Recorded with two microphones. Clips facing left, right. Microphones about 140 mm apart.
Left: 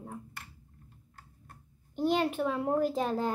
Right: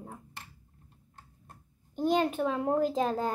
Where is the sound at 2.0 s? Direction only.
45° right (ahead or behind).